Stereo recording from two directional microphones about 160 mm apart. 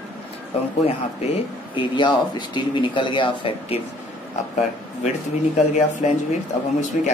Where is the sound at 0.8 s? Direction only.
35° left (ahead or behind).